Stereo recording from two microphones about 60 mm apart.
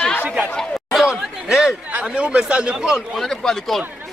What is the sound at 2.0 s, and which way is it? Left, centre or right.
Speech, centre.